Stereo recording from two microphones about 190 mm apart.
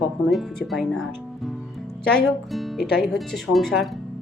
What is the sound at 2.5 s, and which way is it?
Speech, centre (ahead or behind).